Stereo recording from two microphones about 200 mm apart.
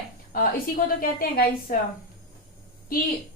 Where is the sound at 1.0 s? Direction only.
45° left (ahead or behind).